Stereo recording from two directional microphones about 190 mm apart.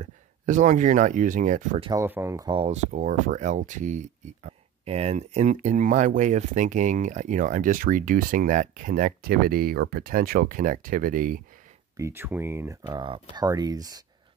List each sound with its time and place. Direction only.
0.0 s speech: 40° right (ahead or behind)
1.9 s speech: 15° right (ahead or behind); by 11.4 s 45° right (ahead or behind)
12.0 s speech: 10° right (ahead or behind)